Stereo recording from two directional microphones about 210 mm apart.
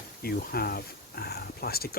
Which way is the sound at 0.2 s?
45° left (ahead or behind).